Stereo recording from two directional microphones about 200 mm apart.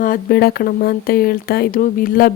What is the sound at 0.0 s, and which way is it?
Speech, 45° left (ahead or behind).